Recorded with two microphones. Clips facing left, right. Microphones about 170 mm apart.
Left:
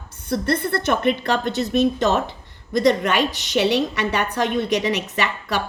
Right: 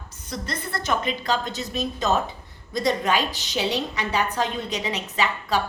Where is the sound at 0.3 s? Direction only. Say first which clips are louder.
Left 10 dB; 60° left (ahead or behind).